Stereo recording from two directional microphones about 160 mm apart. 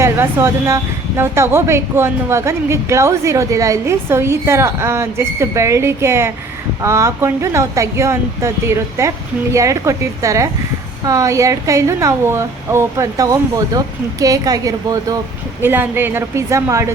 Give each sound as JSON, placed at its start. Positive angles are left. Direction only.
{"t": 0.0, "sound": "a woman's voice", "side_deg": -15}
{"t": 15.6, "sound": "speech", "side_deg": -15}